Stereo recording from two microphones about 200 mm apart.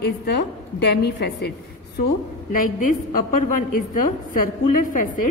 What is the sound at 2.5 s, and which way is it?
A woman's voice, 45° left (ahead or behind).